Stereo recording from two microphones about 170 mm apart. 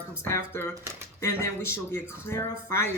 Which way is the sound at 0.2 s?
15° left (ahead or behind).